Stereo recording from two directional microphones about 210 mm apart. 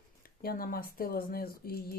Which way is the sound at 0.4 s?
45° left (ahead or behind).